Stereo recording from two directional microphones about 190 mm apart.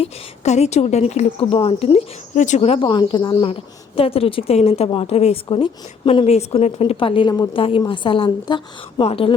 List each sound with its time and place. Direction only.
0.0 s a woman's voice: 35° left (ahead or behind)